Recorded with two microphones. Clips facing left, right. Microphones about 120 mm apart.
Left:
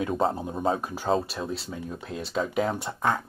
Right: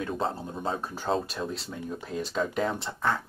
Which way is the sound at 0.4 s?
15° left (ahead or behind).